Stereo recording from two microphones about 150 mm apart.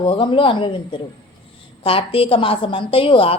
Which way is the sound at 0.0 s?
35° left (ahead or behind).